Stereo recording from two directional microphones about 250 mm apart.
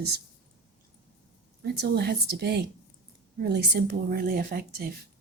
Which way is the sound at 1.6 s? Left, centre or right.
Right.